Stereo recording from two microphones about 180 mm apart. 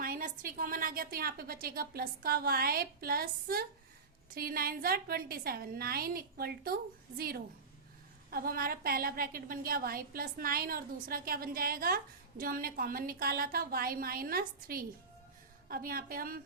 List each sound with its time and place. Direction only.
0.0 s a woman's voice: 50° right (ahead or behind)